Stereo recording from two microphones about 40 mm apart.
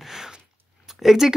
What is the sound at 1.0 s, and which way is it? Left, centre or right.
Speech, centre.